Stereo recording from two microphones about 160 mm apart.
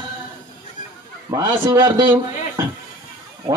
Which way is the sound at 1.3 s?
30° right (ahead or behind).